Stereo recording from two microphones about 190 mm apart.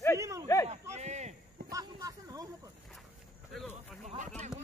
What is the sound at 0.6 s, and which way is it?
Speech, 35° right (ahead or behind).